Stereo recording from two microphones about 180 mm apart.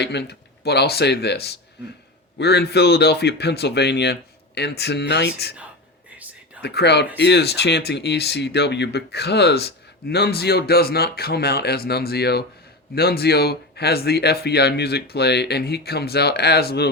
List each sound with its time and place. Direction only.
0.0 s speech: 70° left (ahead or behind)
6.6 s speech: 65° left (ahead or behind)